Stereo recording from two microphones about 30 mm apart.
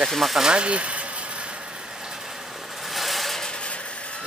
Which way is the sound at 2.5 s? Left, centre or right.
Centre.